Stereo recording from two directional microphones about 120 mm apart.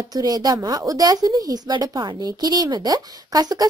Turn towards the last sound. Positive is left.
turn(degrees=-30)  # may be behind; listen again after turning